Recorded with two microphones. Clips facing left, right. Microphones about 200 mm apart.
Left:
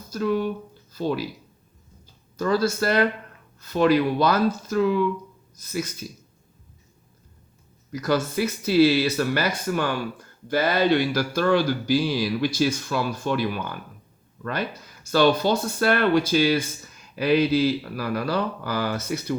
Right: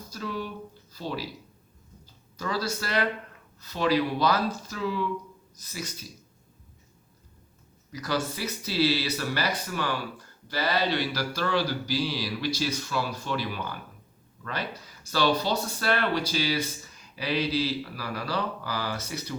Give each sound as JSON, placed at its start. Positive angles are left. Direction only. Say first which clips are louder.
{"t": 0.1, "sound": "speech", "louder": "left 10 dB", "side_deg": 55}
{"t": 2.3, "sound": "speech", "louder": "left 8 dB", "side_deg": 50}
{"t": 7.9, "sound": "speech", "louder": "left 6 dB", "side_deg": 50}
{"t": 15.1, "sound": "speech", "louder": "left 6 dB", "side_deg": 55}